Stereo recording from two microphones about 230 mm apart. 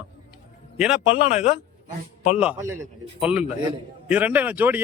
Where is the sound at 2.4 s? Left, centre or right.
Centre.